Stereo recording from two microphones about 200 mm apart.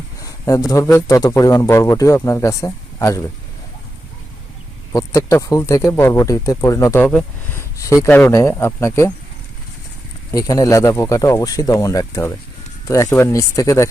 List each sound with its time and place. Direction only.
0.2 s a sound: 15° left (ahead or behind)
0.7 s speech: 15° left (ahead or behind)
4.9 s speech: 15° left (ahead or behind)
10.3 s speech: 20° left (ahead or behind)